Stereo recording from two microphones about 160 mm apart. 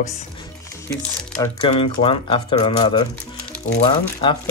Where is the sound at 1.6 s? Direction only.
35° left (ahead or behind).